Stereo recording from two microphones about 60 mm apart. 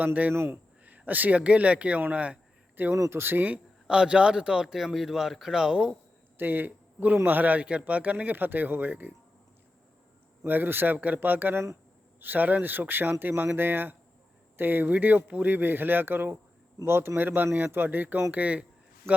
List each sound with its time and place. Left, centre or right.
0.0 s speech: right
0.3 s speech: right
0.9 s speech: right
2.9 s speech: right
3.4 s a man's voice: centre
6.3 s speech: right
10.4 s speech: right
19.1 s speech: right